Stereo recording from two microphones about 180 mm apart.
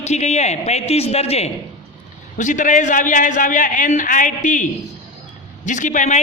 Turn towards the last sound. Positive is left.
turn(degrees=40)  # may be behind; listen again after turning